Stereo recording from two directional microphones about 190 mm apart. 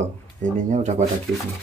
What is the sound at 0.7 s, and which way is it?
Speech, 40° right (ahead or behind).